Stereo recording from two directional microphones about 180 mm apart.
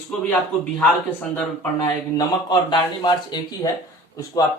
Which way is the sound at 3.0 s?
25° left (ahead or behind).